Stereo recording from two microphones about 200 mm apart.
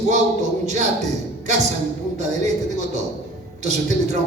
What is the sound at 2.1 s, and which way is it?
A man's voice, 35° right (ahead or behind).